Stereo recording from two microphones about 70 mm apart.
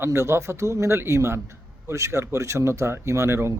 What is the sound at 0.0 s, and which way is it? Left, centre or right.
A man's voice, right.